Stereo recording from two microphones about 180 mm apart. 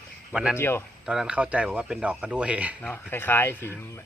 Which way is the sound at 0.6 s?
15° left (ahead or behind).